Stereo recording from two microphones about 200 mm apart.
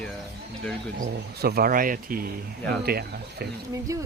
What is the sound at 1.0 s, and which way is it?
Speech, 50° right (ahead or behind).